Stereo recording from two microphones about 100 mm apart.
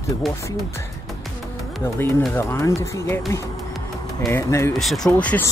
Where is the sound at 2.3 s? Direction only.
25° left (ahead or behind).